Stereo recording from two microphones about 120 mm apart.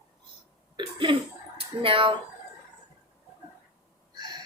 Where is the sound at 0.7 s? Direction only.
45° right (ahead or behind).